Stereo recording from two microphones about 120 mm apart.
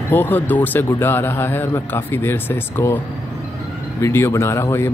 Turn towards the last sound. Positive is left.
turn(degrees=20)  # may be behind; listen again after turning